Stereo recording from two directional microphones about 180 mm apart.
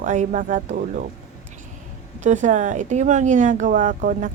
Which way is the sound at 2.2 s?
45° right (ahead or behind).